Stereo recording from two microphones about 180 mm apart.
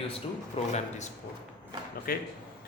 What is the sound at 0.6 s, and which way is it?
Speech, 35° left (ahead or behind).